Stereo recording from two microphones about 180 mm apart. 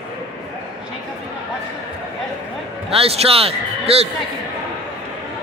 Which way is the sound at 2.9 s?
35° right (ahead or behind).